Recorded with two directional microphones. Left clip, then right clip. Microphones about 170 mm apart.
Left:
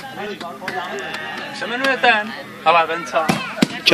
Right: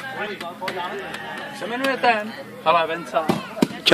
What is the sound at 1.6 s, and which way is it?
Speech, 40° right (ahead or behind).